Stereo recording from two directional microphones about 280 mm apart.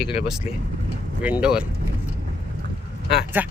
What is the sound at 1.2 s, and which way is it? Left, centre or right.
Speech, centre.